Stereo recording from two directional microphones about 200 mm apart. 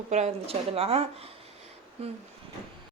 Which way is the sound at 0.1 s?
30° right (ahead or behind).